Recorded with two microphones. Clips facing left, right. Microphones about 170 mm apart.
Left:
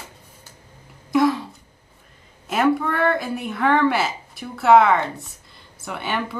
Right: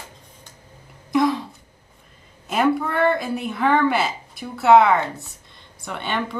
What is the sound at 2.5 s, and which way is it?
A woman's voice, centre (ahead or behind).